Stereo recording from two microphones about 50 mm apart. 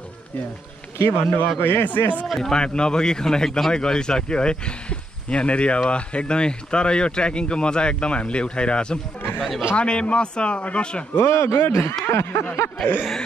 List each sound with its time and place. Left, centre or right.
0.9 s a man's voice: left
2.0 s speech: left
2.2 s speech: centre
2.5 s a man's voice: centre
9.4 s speech: centre
9.8 s speech: left
11.1 s a man's voice: left
12.1 s a sound: left